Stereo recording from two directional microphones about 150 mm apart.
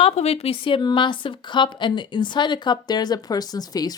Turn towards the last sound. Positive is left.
turn(degrees=25)  # may be behind; listen again after turning